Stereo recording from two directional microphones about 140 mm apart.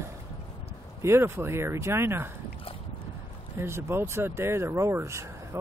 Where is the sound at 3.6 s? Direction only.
20° right (ahead or behind).